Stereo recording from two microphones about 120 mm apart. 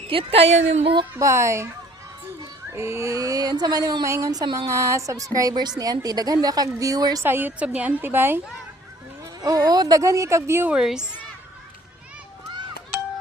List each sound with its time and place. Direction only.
0.1 s a woman's voice: 50° right (ahead or behind); by 0.9 s 70° right (ahead or behind)
1.1 s speech: 25° right (ahead or behind)
2.7 s speech: 25° right (ahead or behind)
7.3 s a woman's voice: 15° right (ahead or behind)
9.4 s speech: 30° right (ahead or behind)
10.7 s speech: 5° right (ahead or behind)